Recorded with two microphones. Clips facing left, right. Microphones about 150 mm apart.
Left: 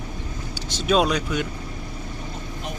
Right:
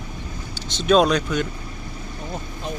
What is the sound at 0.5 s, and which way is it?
Speech, 10° left (ahead or behind).